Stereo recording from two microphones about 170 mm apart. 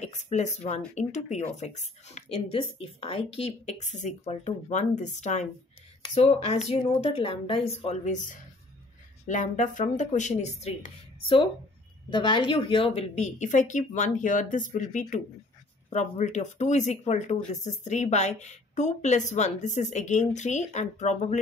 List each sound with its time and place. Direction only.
0.0 s a woman's voice: 45° left (ahead or behind)